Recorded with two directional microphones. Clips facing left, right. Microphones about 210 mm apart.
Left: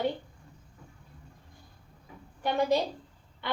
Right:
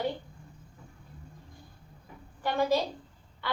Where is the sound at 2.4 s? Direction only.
20° left (ahead or behind).